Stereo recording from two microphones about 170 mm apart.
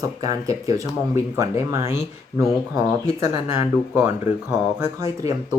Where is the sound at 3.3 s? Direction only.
15° right (ahead or behind).